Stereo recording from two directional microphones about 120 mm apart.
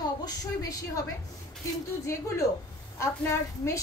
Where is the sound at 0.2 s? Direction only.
30° left (ahead or behind).